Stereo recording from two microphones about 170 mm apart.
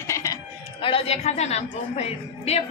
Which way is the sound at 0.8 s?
30° left (ahead or behind).